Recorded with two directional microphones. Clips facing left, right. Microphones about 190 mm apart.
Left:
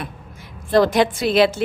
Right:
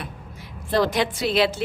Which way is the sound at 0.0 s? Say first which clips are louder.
Left 3 dB; 50° left (ahead or behind).